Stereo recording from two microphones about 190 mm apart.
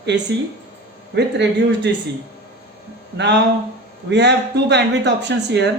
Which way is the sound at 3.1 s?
65° right (ahead or behind).